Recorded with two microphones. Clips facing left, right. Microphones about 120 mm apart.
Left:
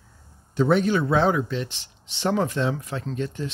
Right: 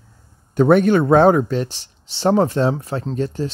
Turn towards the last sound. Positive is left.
turn(degrees=-35)  # may be behind; listen again after turning